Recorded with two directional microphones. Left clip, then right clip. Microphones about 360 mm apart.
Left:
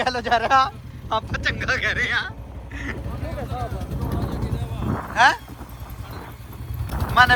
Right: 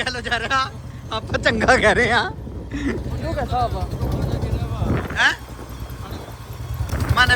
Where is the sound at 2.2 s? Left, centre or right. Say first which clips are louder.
Right 5 dB; centre.